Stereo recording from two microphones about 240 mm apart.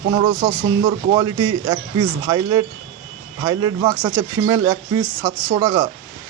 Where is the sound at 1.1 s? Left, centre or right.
Centre.